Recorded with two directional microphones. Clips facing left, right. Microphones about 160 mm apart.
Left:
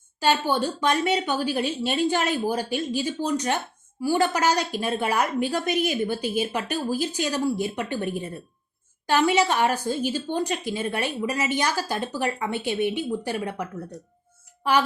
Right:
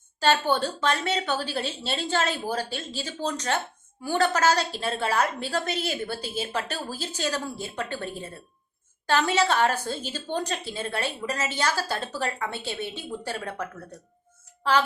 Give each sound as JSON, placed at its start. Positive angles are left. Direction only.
{"t": 0.2, "sound": "a woman's voice", "side_deg": 10}